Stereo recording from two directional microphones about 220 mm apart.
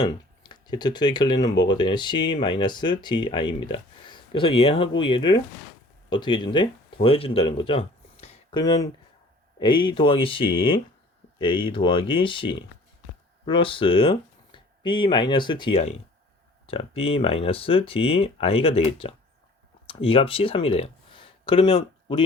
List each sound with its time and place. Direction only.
0.0 s speech: 20° left (ahead or behind)
8.2 s a sound: 25° left (ahead or behind)
9.6 s speech: 20° left (ahead or behind)